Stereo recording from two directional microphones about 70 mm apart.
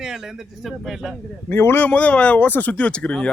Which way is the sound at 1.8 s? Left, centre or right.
Centre.